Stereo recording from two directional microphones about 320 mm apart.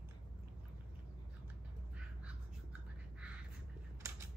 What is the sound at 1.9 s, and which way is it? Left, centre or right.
Bird, centre.